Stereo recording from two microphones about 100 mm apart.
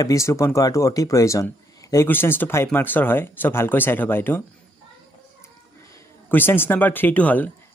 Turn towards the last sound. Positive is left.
turn(degrees=15)  # may be behind; listen again after turning